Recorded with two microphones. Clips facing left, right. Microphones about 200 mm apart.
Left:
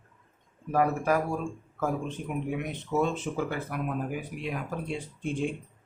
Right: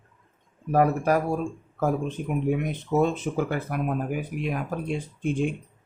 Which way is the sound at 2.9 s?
50° right (ahead or behind).